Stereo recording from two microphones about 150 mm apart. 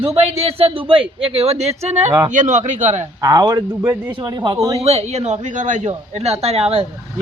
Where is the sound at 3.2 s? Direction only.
25° right (ahead or behind).